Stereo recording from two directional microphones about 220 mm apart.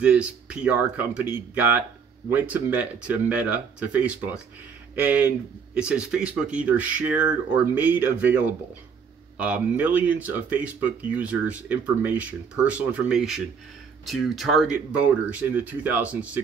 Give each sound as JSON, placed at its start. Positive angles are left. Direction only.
{"t": 0.0, "sound": "speech", "side_deg": -5}